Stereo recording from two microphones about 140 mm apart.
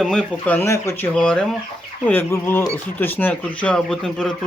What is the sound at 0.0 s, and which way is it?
Speech, 5° left (ahead or behind).